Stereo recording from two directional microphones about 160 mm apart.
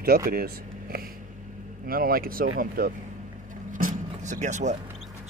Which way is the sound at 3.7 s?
55° right (ahead or behind).